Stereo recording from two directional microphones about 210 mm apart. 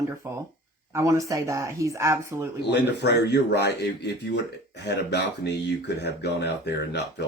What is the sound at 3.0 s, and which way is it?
Speech, 55° left (ahead or behind).